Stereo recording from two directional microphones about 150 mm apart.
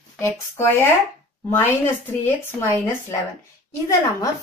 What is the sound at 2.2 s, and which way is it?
Speech, 15° left (ahead or behind).